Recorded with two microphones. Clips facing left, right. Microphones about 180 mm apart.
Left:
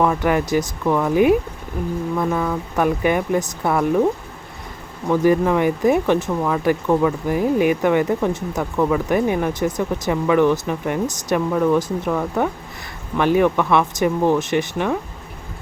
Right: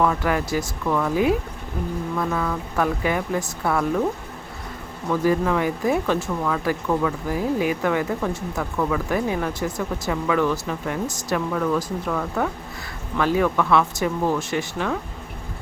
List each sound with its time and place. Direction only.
0.0 s speech: 20° left (ahead or behind)
2.1 s speech: 20° left (ahead or behind)
5.0 s speech: 20° left (ahead or behind)